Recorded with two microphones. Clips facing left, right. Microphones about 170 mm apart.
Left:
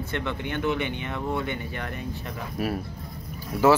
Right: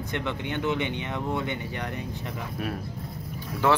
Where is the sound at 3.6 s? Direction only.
5° left (ahead or behind).